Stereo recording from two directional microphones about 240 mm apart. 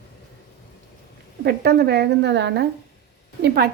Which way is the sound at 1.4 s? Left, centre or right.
Right.